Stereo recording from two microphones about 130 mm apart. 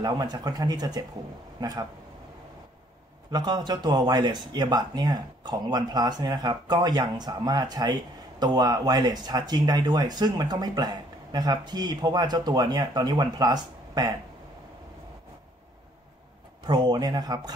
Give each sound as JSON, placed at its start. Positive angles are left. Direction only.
{"t": 0.0, "sound": "speech", "side_deg": -30}
{"t": 3.3, "sound": "speech", "side_deg": -35}
{"t": 16.6, "sound": "speech", "side_deg": -35}